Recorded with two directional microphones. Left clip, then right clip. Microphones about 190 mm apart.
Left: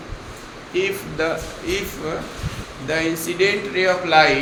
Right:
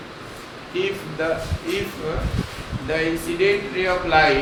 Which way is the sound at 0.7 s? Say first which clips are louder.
Left 2 dB; 40° left (ahead or behind).